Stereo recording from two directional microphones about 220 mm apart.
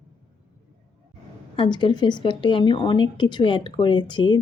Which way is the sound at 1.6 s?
20° left (ahead or behind).